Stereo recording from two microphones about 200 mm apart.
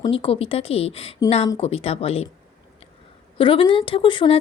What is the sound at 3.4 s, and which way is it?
A woman's voice, 25° left (ahead or behind).